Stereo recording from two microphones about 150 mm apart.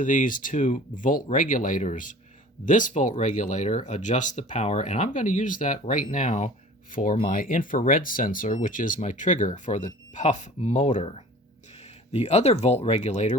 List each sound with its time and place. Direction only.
0.0 s speech: 60° left (ahead or behind)